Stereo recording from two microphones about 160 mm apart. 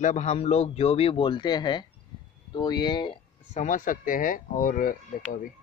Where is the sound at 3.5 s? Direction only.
50° left (ahead or behind).